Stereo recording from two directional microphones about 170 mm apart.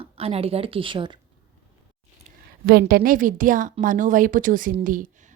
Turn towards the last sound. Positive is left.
turn(degrees=-50)  # may be behind; listen again after turning